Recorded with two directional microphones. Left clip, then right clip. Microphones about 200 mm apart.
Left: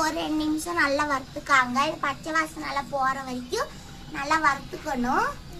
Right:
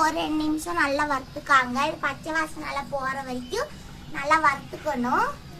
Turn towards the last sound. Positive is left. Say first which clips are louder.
# right 1 dB
turn(degrees=-5)  # may be behind; listen again after turning